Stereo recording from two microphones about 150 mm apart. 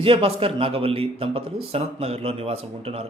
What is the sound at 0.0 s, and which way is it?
A man's voice, 40° right (ahead or behind).